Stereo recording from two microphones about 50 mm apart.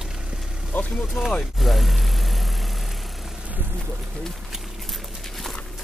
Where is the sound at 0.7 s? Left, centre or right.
Left.